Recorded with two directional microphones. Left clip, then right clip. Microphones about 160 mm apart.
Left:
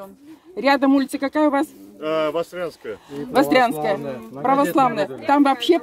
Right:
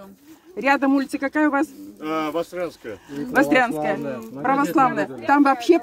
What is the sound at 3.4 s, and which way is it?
Speech, 20° left (ahead or behind).